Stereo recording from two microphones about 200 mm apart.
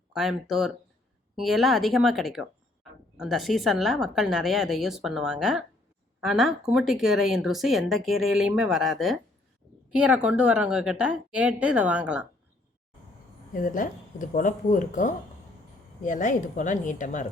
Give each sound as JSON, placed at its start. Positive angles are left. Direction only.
{"t": 0.1, "sound": "speech", "side_deg": 0}
{"t": 13.5, "sound": "speech", "side_deg": 40}